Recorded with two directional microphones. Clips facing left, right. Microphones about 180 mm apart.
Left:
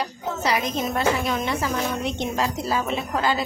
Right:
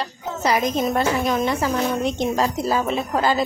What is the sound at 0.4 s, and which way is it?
A woman's voice, 45° right (ahead or behind).